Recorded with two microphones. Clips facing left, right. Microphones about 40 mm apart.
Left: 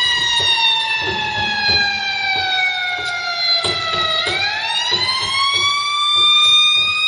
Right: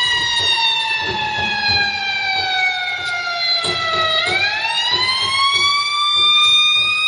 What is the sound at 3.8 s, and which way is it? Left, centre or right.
Emergency vehicle, centre.